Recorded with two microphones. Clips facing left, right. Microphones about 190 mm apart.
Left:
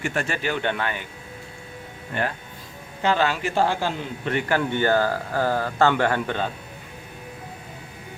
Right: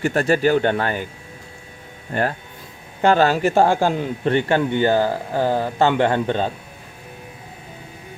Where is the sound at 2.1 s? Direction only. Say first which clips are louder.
Right 5 dB; 40° right (ahead or behind).